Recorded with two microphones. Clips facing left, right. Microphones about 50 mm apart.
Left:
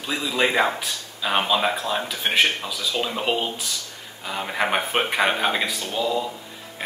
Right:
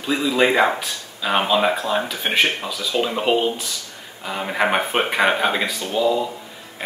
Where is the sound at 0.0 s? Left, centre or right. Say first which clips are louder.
Right 5 dB; centre.